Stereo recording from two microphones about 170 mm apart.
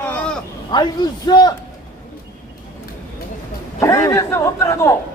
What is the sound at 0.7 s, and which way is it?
Speech, 25° left (ahead or behind).